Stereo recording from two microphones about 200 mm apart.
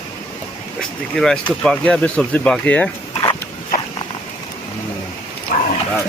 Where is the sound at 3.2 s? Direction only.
20° left (ahead or behind).